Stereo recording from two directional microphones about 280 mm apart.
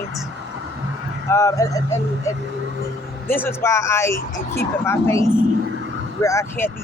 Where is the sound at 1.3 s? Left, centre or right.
Centre.